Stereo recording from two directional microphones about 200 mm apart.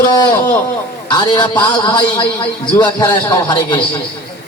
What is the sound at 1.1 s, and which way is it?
A man's voice, 20° left (ahead or behind).